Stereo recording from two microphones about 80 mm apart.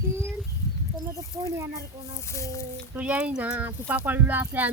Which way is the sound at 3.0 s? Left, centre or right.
Centre.